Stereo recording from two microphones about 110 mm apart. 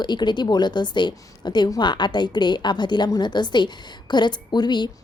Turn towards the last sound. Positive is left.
turn(degrees=40)  # may be behind; listen again after turning